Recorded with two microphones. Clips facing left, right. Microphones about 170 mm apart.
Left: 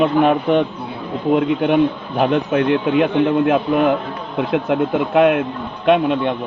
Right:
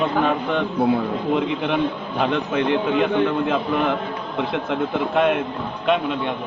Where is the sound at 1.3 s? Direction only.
50° left (ahead or behind).